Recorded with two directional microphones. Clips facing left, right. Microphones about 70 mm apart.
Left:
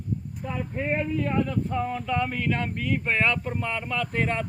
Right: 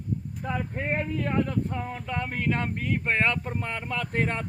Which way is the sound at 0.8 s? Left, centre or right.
Right.